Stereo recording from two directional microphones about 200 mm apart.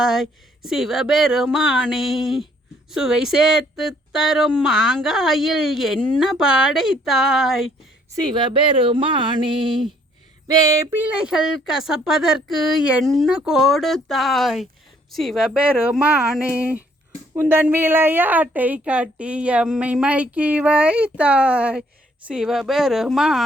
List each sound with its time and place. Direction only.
0.0 s speech: centre (ahead or behind)
8.4 s a woman's voice: 25° right (ahead or behind); by 23.4 s 5° right (ahead or behind)